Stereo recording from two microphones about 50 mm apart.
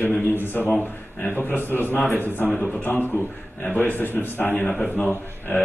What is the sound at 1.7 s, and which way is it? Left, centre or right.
Speech, left.